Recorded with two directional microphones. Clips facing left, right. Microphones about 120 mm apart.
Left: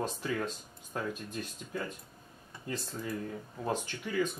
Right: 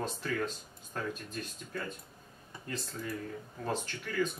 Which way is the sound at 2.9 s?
25° left (ahead or behind).